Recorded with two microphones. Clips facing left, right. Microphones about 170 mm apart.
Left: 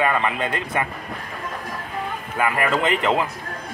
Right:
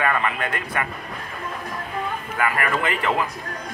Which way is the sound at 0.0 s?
20° left (ahead or behind).